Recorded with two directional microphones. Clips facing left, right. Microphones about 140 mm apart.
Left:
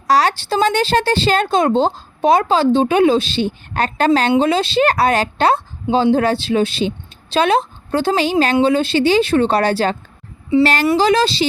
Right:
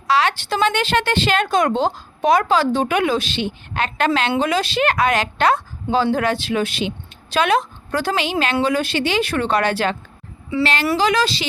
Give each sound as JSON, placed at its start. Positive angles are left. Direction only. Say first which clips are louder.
{"t": 0.1, "sound": "a woman's voice", "louder": "left 3 dB", "side_deg": 35}
{"t": 10.9, "sound": "a woman's voice", "louder": "left 4 dB", "side_deg": 30}